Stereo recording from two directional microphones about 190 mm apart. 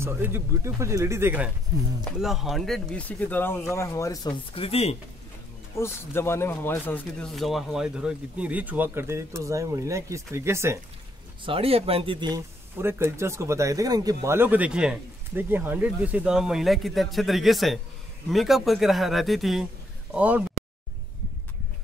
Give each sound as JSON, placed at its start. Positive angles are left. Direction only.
{"t": 0.0, "sound": "speech", "side_deg": -10}
{"t": 4.6, "sound": "speech", "side_deg": 30}
{"t": 5.8, "sound": "speech", "side_deg": 15}
{"t": 11.4, "sound": "speech", "side_deg": -30}